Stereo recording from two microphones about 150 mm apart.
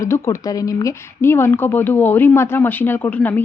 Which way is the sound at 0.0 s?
20° left (ahead or behind).